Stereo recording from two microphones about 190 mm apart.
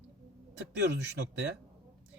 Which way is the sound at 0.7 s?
70° right (ahead or behind).